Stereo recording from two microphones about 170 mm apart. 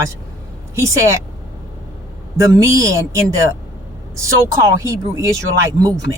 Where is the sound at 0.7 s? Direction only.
15° right (ahead or behind).